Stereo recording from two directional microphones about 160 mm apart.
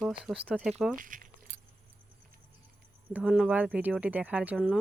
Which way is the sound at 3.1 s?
5° right (ahead or behind).